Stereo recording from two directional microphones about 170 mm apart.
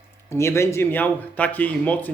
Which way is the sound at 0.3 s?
15° left (ahead or behind).